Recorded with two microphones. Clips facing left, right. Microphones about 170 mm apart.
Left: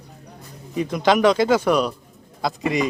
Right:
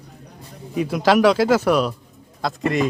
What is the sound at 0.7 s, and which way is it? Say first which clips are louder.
Speech: right 2 dB; 5° right (ahead or behind).